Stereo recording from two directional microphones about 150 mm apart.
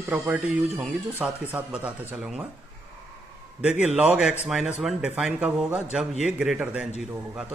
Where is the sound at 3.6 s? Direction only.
10° right (ahead or behind).